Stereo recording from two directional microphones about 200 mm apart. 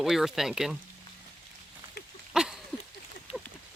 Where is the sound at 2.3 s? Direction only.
Centre (ahead or behind).